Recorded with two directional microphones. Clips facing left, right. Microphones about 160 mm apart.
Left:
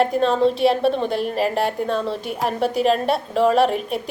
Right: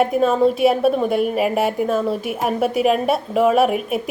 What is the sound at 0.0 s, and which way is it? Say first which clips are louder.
A woman's voice: right 2 dB; 5° right (ahead or behind).